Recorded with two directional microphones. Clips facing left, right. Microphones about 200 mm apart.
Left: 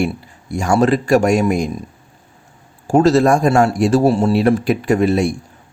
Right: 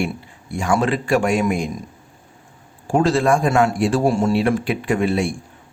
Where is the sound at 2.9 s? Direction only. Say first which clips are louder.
Left 5 dB; 40° left (ahead or behind).